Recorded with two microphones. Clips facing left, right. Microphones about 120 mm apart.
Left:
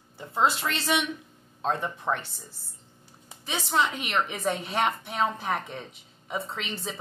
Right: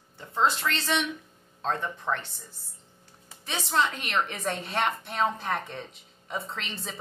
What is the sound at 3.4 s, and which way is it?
A woman's voice, 5° left (ahead or behind).